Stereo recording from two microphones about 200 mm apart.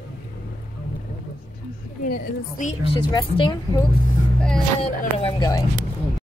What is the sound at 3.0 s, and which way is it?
Speech, 25° left (ahead or behind).